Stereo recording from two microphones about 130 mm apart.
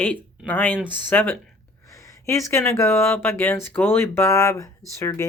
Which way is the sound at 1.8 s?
25° left (ahead or behind).